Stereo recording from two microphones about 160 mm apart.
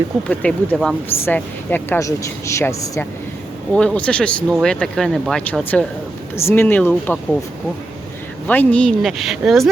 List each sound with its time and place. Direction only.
0.3 s speech: 10° left (ahead or behind)
3.7 s speech: 5° left (ahead or behind)
8.4 s speech: 10° left (ahead or behind)